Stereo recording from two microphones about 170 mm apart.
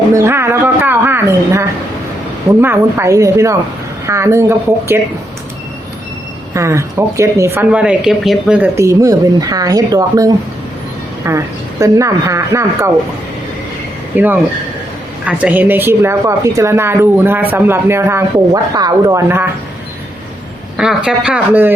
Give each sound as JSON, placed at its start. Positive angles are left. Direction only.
{"t": 0.1, "sound": "a sound", "side_deg": -15}
{"t": 2.6, "sound": "speech", "side_deg": -15}
{"t": 6.5, "sound": "speech", "side_deg": -15}
{"t": 14.1, "sound": "speech", "side_deg": -10}
{"t": 20.7, "sound": "a man's voice", "side_deg": -5}